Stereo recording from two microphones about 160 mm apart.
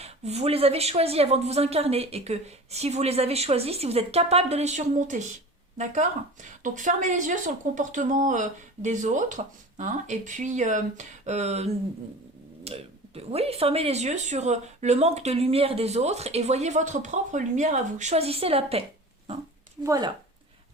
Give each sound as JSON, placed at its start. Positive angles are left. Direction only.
{"t": 0.0, "sound": "a woman's voice", "side_deg": -40}
{"t": 19.8, "sound": "speech", "side_deg": -20}